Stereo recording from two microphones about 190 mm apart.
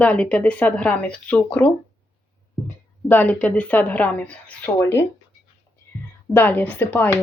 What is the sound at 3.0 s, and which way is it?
Speech, 10° left (ahead or behind).